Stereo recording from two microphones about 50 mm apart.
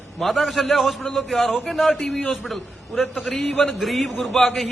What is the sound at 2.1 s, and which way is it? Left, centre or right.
Speech, left.